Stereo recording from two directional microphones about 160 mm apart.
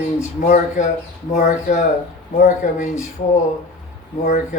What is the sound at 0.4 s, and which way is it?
Speech, 60° left (ahead or behind).